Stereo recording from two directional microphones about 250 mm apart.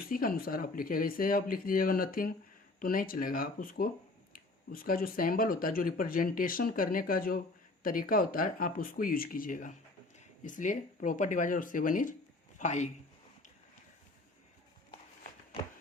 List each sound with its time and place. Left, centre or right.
0.0 s a man's voice: left